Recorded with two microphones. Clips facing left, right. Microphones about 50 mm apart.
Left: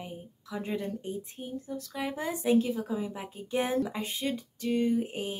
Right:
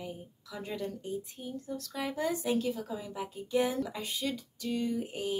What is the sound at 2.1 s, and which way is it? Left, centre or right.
Speech, left.